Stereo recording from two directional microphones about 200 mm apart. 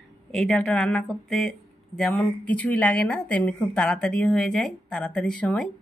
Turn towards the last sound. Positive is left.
turn(degrees=5)  # may be behind; listen again after turning